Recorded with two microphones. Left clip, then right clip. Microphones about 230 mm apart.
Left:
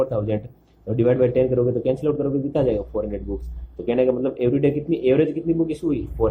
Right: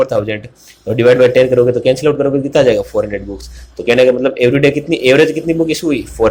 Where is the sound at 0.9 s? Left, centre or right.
Right.